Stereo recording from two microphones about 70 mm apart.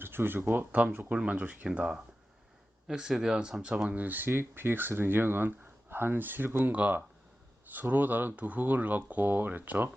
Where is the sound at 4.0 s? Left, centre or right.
Right.